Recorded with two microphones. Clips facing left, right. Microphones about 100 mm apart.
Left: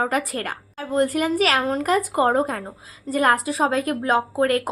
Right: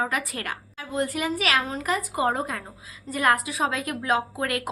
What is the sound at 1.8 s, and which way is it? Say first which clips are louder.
A woman's voice: left 6 dB; 55° left (ahead or behind).